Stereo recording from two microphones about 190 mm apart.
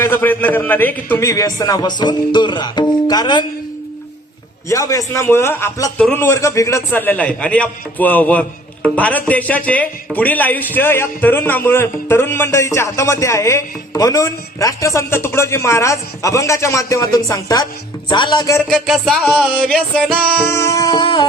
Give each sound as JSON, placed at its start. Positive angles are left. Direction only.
{"t": 0.0, "sound": "a man's voice", "side_deg": 10}
{"t": 4.7, "sound": "a man's voice", "side_deg": 15}
{"t": 18.7, "sound": "music", "side_deg": 5}
{"t": 20.5, "sound": "a man's voice", "side_deg": 15}